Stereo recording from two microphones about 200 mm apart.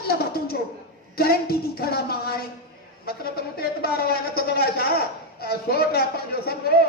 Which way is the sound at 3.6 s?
50° left (ahead or behind).